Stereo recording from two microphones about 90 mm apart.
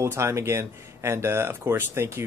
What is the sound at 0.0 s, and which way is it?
Speech, 35° right (ahead or behind).